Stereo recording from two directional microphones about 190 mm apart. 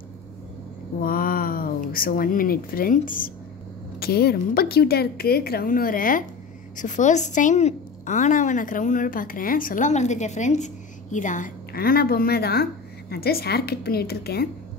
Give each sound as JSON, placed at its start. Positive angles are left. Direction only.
{"t": 1.0, "sound": "a woman's voice", "side_deg": 50}